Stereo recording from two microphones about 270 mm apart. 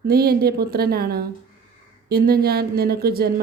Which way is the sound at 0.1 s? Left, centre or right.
Right.